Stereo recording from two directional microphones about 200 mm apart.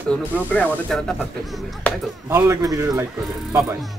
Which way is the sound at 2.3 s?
15° right (ahead or behind).